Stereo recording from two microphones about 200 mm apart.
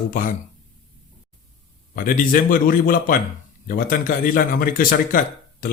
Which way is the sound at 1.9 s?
45° left (ahead or behind).